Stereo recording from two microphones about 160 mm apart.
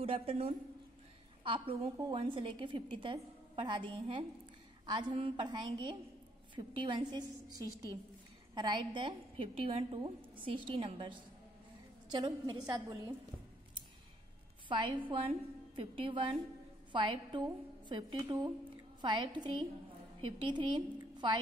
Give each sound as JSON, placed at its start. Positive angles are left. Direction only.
{"t": 0.0, "sound": "a woman's voice", "side_deg": -35}
{"t": 14.7, "sound": "a woman's voice", "side_deg": -30}